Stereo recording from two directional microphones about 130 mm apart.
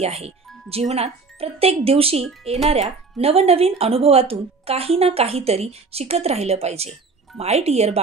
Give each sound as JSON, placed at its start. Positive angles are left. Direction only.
{"t": 0.0, "sound": "speech", "side_deg": -50}